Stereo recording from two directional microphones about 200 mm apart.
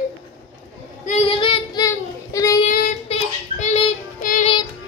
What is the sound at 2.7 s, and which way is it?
Child singing, 40° left (ahead or behind).